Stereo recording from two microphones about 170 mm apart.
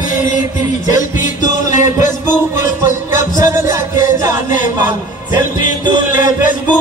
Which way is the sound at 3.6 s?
15° right (ahead or behind).